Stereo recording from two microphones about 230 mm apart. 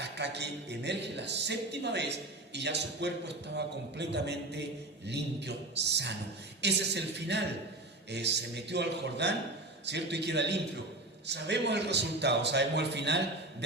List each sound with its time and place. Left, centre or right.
0.0 s a man's voice: right